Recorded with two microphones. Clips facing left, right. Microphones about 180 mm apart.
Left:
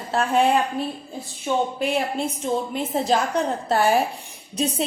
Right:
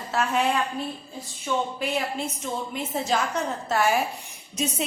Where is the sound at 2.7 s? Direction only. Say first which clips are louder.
Left 2 dB; 35° left (ahead or behind).